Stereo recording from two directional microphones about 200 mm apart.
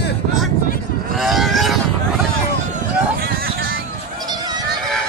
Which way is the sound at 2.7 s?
50° right (ahead or behind).